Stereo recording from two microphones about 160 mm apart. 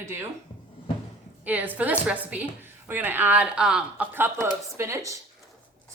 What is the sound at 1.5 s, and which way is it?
A woman's voice, 10° right (ahead or behind).